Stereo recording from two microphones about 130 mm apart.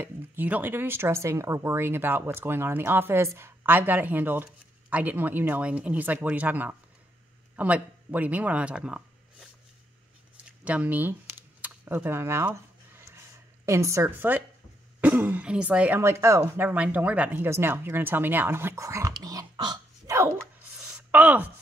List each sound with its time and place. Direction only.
0.0 s speech: 15° right (ahead or behind)
10.6 s computer keyboard: 10° right (ahead or behind)
13.7 s a woman's voice: 25° right (ahead or behind)
16.0 s speech: 20° right (ahead or behind)
19.1 s a sound: 30° right (ahead or behind)
21.1 s speech: 10° right (ahead or behind)